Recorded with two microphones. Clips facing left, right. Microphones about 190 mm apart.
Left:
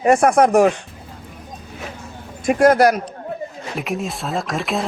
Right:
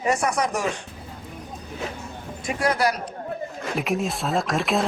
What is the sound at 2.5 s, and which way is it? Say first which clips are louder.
Speech: left 10 dB; 50° left (ahead or behind).